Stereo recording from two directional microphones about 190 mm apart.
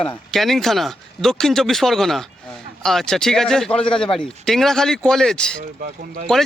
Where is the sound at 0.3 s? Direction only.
Centre (ahead or behind).